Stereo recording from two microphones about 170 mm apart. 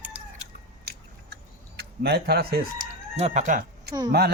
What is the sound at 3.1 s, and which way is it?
Speech, 40° right (ahead or behind).